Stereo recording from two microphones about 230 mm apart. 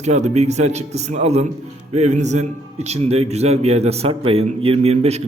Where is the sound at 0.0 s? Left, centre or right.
Right.